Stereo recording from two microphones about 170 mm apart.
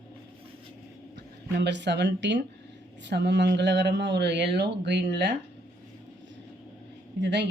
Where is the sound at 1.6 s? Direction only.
90° right.